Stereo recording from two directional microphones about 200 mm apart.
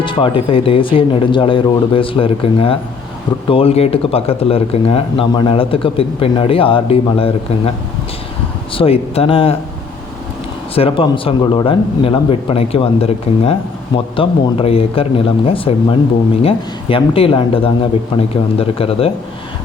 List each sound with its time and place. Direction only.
0.0 s speech: 25° left (ahead or behind)
8.7 s speech: 30° left (ahead or behind)
10.8 s speech: 25° left (ahead or behind)